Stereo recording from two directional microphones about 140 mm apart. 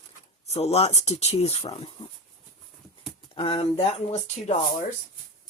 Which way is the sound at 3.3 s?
40° left (ahead or behind).